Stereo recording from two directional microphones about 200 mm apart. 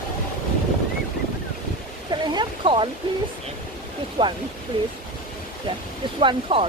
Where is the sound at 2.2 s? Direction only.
25° right (ahead or behind).